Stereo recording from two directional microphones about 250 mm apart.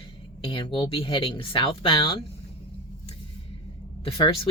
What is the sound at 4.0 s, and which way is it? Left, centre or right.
Speech, left.